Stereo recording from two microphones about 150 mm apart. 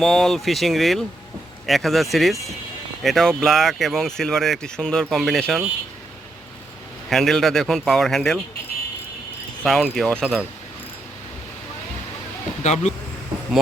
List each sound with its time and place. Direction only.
0.0 s speech: centre (ahead or behind)
7.1 s speech: centre (ahead or behind)
9.6 s speech: centre (ahead or behind)
12.6 s speech: 50° left (ahead or behind)